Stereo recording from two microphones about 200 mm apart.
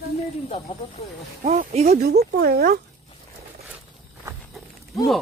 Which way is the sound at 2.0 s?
50° right (ahead or behind).